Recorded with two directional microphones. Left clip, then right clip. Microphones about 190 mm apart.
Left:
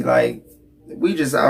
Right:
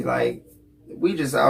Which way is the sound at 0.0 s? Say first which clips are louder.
Left 6 dB; 15° left (ahead or behind).